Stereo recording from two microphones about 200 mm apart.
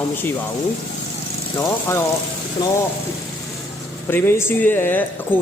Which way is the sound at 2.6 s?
20° left (ahead or behind).